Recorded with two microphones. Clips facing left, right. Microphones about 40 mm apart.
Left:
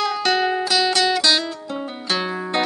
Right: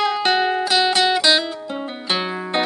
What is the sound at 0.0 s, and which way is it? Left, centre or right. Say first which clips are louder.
Music: right 2 dB; centre.